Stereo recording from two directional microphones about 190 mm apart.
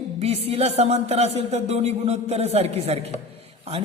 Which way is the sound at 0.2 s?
30° right (ahead or behind).